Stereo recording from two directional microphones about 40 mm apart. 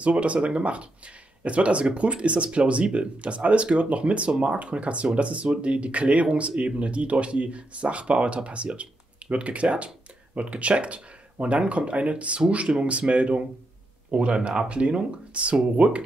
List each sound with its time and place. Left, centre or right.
0.0 s speech: right